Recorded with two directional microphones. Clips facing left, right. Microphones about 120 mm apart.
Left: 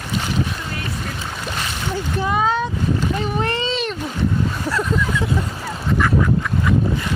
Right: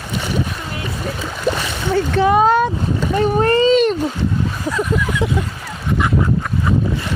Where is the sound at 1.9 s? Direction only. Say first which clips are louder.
Right 9 dB; 70° right (ahead or behind).